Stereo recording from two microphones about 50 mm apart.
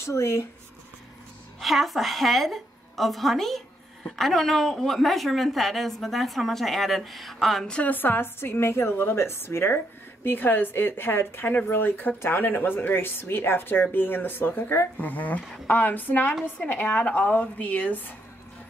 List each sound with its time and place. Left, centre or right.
0.0 s speech: left
1.6 s a woman's voice: centre
7.8 s a woman's voice: left
10.2 s a woman's voice: left